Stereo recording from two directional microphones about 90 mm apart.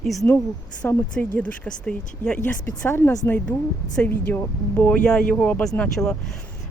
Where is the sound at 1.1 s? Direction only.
15° left (ahead or behind).